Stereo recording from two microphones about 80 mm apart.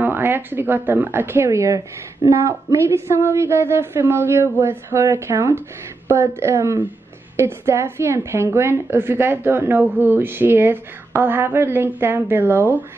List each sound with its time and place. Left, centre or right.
0.0 s a woman's voice: right